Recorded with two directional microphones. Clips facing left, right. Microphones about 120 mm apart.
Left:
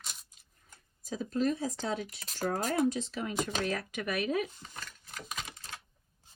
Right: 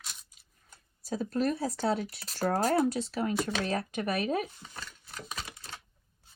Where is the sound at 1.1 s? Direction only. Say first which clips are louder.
Right 1 dB; 45° right (ahead or behind).